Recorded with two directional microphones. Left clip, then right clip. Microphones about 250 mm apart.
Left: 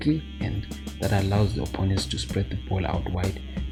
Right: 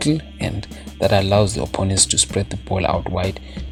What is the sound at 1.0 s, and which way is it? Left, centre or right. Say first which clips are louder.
Speech: right 11 dB; right.